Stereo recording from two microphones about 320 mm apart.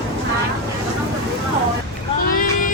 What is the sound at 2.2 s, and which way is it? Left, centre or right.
Vehicle, left.